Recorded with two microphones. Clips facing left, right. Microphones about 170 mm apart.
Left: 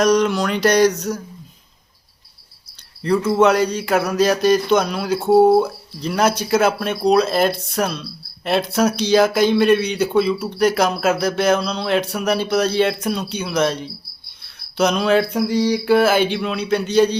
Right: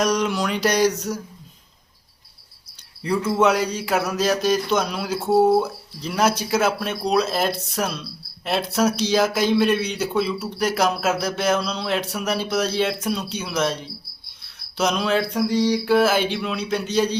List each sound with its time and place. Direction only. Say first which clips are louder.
0.0 s speech: left 5 dB; 5° right (ahead or behind)
3.3 s a man's voice: left 3 dB; 5° right (ahead or behind)
5.2 s speech: left 4 dB; 30° left (ahead or behind)
6.0 s a man's voice: left 3 dB; 5° right (ahead or behind)